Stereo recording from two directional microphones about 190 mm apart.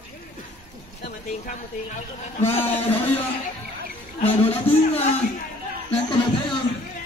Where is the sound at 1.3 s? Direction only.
40° left (ahead or behind).